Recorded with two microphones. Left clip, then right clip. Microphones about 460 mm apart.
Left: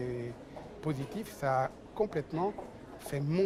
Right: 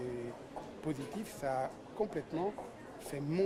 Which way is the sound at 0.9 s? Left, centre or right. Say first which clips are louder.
Left 4 dB; left.